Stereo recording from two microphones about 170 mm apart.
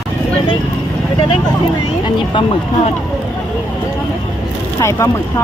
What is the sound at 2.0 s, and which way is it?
Speech, 30° left (ahead or behind).